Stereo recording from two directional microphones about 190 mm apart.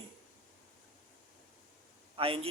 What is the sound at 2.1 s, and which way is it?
Speech, 30° right (ahead or behind).